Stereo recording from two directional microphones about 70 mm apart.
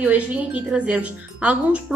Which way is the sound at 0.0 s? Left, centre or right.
Centre.